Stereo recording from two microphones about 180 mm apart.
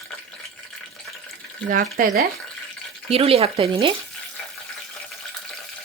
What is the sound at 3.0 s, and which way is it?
Speech, 35° right (ahead or behind).